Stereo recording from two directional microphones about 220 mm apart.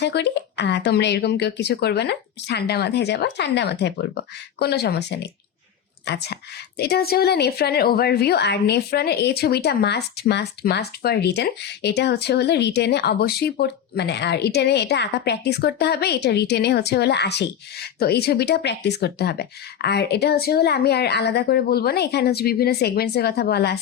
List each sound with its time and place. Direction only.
0.0 s a woman's voice: 50° left (ahead or behind)